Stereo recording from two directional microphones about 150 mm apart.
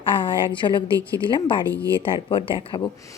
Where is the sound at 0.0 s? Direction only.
35° left (ahead or behind).